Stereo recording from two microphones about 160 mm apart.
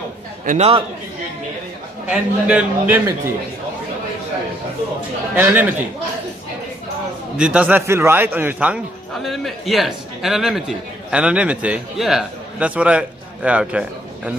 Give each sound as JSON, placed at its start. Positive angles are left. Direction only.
{"t": 0.5, "sound": "a man's voice", "side_deg": -40}
{"t": 2.0, "sound": "a man's voice", "side_deg": -5}
{"t": 5.3, "sound": "a man's voice", "side_deg": -10}
{"t": 7.3, "sound": "a man's voice", "side_deg": -5}